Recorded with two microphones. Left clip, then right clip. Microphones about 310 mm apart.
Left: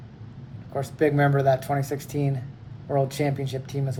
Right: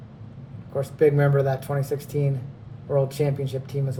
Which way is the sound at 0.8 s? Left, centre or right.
Centre.